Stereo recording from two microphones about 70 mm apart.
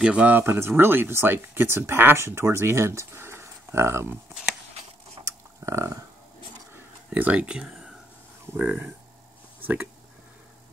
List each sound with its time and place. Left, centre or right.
0.0 s speech: centre
0.4 s speech: right
5.2 s a sound: right
7.2 s speech: right
8.5 s speech: right